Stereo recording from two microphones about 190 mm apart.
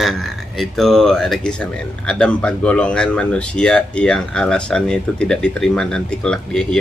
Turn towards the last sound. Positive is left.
turn(degrees=5)  # may be behind; listen again after turning